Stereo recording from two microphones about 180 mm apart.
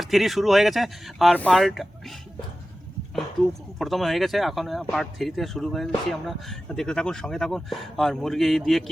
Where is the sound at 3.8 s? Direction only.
Centre (ahead or behind).